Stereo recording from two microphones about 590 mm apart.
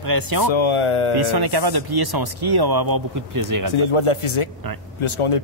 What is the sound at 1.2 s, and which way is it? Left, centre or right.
Speech, right.